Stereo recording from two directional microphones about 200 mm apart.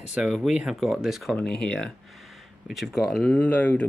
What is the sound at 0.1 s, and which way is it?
Speech, centre (ahead or behind).